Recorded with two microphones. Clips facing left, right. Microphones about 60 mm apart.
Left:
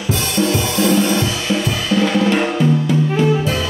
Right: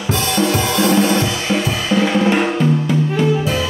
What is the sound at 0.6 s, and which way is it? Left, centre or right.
Music, right.